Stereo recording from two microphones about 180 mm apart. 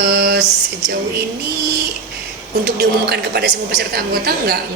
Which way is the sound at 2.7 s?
65° right (ahead or behind).